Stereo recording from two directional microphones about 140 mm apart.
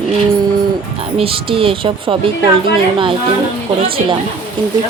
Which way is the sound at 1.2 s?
40° right (ahead or behind).